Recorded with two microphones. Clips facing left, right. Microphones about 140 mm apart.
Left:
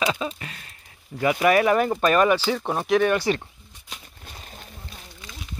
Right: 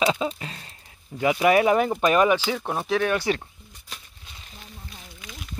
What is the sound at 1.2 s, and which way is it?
Speech, 15° right (ahead or behind).